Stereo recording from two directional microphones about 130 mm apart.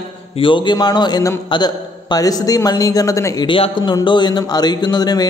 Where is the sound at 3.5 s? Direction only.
40° left (ahead or behind).